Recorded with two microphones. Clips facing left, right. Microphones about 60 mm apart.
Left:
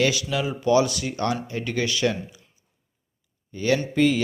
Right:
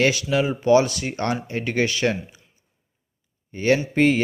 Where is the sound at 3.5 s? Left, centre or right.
Right.